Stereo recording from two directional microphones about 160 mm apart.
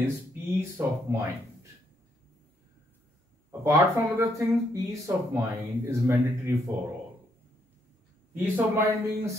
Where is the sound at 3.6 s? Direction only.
20° right (ahead or behind).